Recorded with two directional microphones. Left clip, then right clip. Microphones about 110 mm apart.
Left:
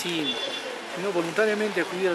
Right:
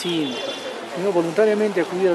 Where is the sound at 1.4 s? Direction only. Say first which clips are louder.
Right 5 dB; 5° left (ahead or behind).